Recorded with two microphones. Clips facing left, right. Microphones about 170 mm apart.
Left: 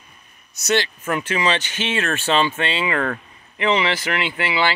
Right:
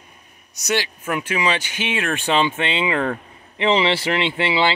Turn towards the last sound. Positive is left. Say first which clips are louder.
# right 2 dB
turn(degrees=-25)  # may be behind; listen again after turning